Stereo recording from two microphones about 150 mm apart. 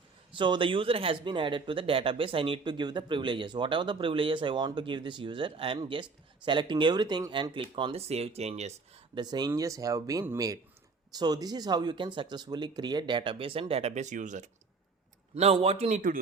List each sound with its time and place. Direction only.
0.3 s speech: 30° right (ahead or behind)
9.1 s speech: 30° right (ahead or behind); by 14.5 s 55° right (ahead or behind)
15.4 s a man's voice: 45° right (ahead or behind)